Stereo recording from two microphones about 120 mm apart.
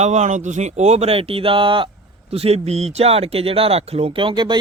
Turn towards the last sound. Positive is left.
turn(degrees=-40)  # may be behind; listen again after turning